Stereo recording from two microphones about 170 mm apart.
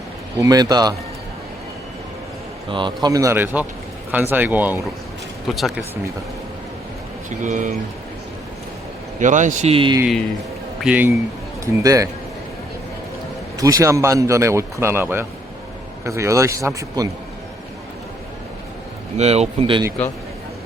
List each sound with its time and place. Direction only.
0.3 s speech: 20° right (ahead or behind)
2.6 s speech: 30° right (ahead or behind); by 5.8 s centre (ahead or behind)
7.3 s speech: 45° right (ahead or behind)
9.2 s speech: 45° right (ahead or behind); by 10.0 s 30° right (ahead or behind)
10.8 s speech: 5° right (ahead or behind)
11.6 s speech: 20° right (ahead or behind)
13.6 s speech: 20° right (ahead or behind)
19.1 s speech: 40° right (ahead or behind)